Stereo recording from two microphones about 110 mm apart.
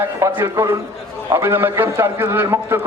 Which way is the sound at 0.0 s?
25° right (ahead or behind).